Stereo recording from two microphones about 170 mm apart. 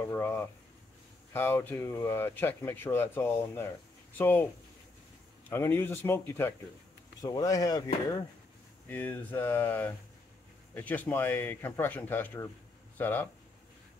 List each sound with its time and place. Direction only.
0.0 s speech: 10° left (ahead or behind)
5.5 s speech: 15° left (ahead or behind)
8.8 s speech: 10° left (ahead or behind)